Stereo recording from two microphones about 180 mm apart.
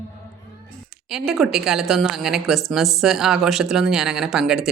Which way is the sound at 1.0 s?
Centre (ahead or behind).